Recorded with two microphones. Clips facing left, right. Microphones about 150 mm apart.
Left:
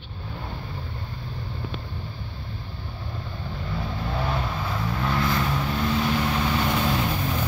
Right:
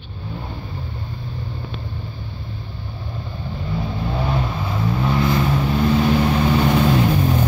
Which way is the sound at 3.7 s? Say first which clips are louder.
Right 5 dB; 10° right (ahead or behind).